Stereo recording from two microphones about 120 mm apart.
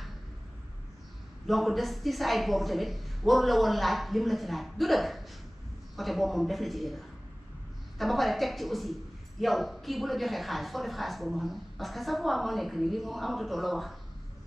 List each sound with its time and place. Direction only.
1.5 s a woman's voice: centre (ahead or behind)